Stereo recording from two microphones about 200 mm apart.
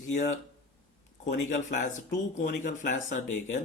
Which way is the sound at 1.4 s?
40° left (ahead or behind).